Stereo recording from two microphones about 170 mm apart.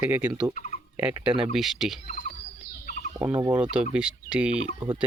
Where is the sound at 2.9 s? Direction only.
45° left (ahead or behind).